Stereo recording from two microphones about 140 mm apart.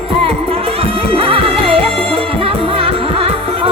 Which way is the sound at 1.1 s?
40° right (ahead or behind).